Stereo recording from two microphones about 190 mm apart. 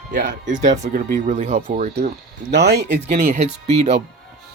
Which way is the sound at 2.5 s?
60° right (ahead or behind).